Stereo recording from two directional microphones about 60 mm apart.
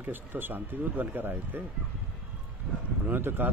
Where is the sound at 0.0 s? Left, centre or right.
Right.